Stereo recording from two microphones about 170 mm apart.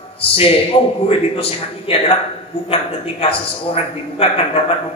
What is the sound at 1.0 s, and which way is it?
A man's voice, 35° left (ahead or behind).